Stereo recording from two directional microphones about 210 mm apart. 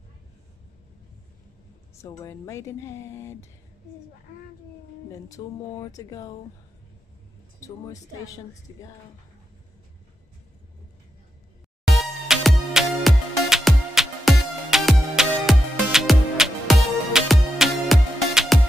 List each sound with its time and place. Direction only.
2.0 s speech: 15° left (ahead or behind)
5.1 s speech: 15° left (ahead or behind)
8.7 s speech: 20° left (ahead or behind)
11.9 s music: centre (ahead or behind)